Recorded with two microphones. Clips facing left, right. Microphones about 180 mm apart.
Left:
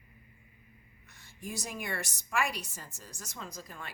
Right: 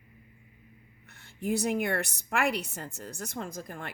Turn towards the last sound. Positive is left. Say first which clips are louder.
# right 6 dB
turn(degrees=-55)  # may be behind; listen again after turning